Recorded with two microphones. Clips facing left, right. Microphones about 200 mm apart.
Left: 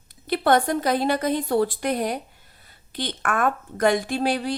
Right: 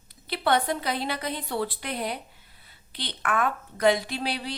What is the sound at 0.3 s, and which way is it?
A woman's voice, 45° left (ahead or behind).